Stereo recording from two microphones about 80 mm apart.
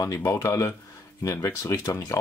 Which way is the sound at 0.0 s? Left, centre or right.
Left.